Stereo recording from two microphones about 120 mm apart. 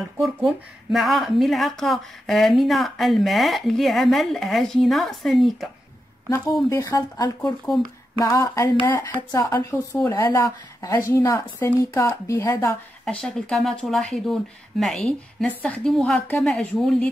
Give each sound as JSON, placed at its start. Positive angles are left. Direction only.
{"t": 0.2, "sound": "speech", "side_deg": 0}
{"t": 6.3, "sound": "a woman's voice", "side_deg": 25}
{"t": 13.0, "sound": "speech", "side_deg": 5}